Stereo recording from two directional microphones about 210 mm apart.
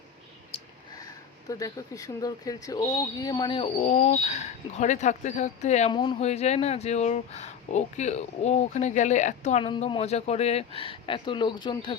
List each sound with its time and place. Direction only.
1.5 s speech: 15° left (ahead or behind); by 5.9 s 35° left (ahead or behind)
5.9 s speech: 20° left (ahead or behind)